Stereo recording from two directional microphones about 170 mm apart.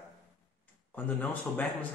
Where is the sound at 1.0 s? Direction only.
10° left (ahead or behind).